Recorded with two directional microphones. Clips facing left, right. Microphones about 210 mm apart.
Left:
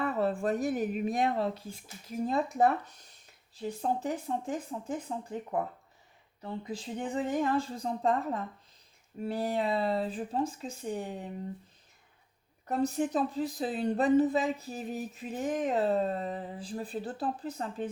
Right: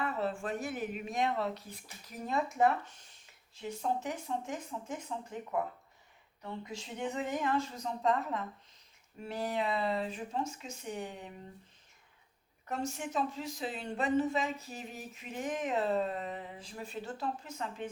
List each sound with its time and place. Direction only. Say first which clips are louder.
0.0 s speech: left 5 dB; 40° left (ahead or behind)
12.6 s speech: left 8 dB; 35° left (ahead or behind)